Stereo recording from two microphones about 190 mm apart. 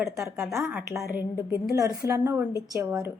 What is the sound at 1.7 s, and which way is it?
A woman's voice, 20° right (ahead or behind).